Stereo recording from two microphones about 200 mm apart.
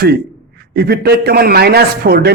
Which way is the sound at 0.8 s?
50° right (ahead or behind).